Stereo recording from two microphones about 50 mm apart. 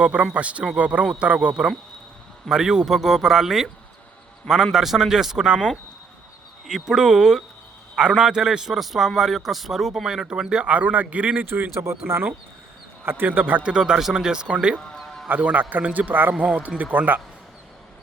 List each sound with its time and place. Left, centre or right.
0.0 s a man's voice: right; by 5.5 s centre
6.7 s a man's voice: centre
10.7 s a man's voice: right
11.4 s speech: right
11.9 s speech: right
13.1 s speech: right
13.6 s a man's voice: centre
14.9 s music: centre
15.3 s speech: right